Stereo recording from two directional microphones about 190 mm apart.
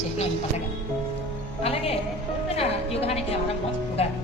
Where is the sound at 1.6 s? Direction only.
30° left (ahead or behind).